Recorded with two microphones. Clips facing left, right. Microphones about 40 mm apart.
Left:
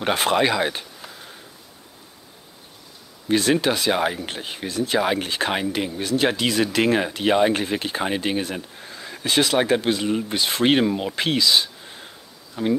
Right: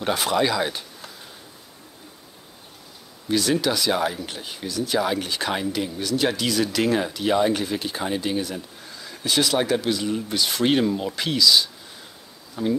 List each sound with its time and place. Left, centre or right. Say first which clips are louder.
0.0 s speech: left 2 dB; left
3.3 s speech: left 2 dB; left